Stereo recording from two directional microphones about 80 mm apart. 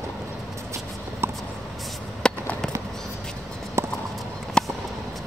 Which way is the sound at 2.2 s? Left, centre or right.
Centre.